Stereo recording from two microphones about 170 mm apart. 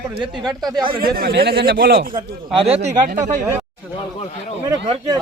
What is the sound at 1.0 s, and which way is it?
Speech, 65° right (ahead or behind).